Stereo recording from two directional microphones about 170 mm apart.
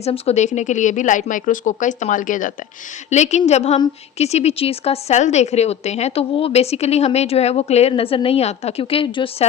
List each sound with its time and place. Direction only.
0.0 s speech: 40° left (ahead or behind)